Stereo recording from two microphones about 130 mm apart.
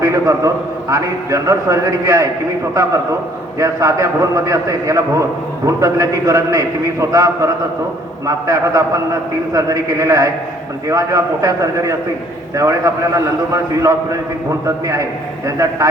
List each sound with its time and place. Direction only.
0.0 s a man's voice: 25° right (ahead or behind)
15.4 s a man's voice: 25° right (ahead or behind)